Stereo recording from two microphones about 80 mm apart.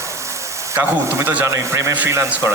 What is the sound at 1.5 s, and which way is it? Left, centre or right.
A man's voice, right.